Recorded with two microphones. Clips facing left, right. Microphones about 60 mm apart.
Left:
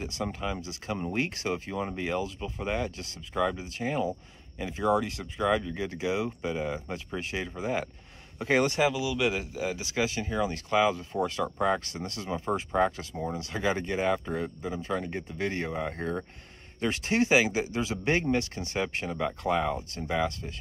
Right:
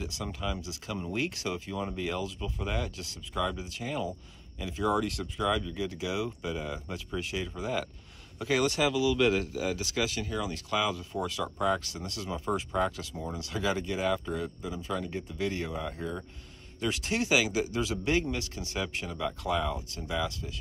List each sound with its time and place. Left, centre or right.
0.0 s speech: left
9.0 s speech: centre
11.8 s speech: left
16.0 s speech: left
16.8 s speech: left